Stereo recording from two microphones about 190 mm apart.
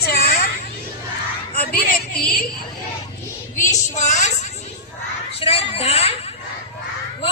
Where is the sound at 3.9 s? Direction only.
40° left (ahead or behind).